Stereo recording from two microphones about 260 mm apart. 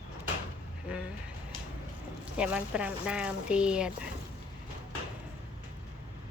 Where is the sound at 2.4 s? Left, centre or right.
Centre.